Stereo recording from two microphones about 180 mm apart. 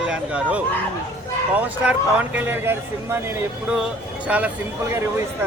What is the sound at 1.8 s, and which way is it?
A man's voice, 5° right (ahead or behind).